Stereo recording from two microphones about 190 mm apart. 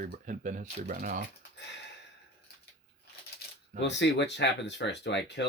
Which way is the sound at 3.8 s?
65° left (ahead or behind).